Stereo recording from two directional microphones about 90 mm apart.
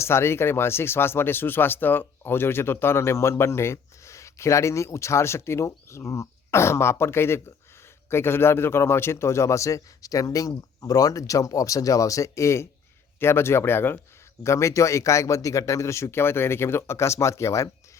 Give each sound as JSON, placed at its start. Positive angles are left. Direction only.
{"t": 0.0, "sound": "speech", "side_deg": 30}